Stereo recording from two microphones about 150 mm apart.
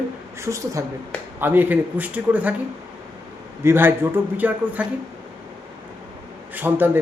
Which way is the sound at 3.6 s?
15° right (ahead or behind).